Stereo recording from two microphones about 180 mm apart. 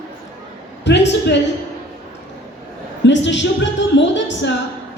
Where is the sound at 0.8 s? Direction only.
75° left (ahead or behind).